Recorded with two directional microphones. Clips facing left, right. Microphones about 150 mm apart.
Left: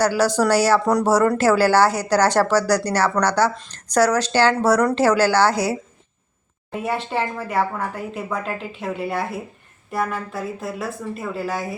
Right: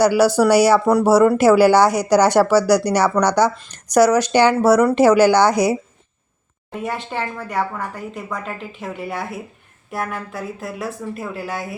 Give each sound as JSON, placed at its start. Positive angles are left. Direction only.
{"t": 0.0, "sound": "speech", "side_deg": -10}
{"t": 6.7, "sound": "speech", "side_deg": 0}